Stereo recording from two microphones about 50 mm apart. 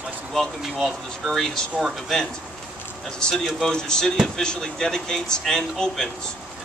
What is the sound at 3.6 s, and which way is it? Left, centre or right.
Speech, centre.